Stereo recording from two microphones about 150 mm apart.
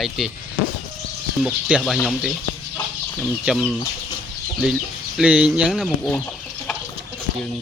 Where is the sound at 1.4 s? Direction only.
5° right (ahead or behind).